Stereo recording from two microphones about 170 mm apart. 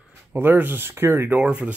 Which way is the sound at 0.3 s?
10° right (ahead or behind).